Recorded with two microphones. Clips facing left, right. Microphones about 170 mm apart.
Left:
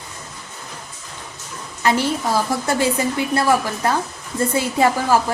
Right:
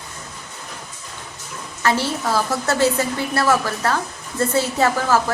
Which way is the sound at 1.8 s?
15° left (ahead or behind).